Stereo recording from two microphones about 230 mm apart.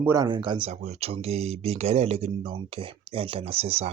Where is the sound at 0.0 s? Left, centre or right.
Centre.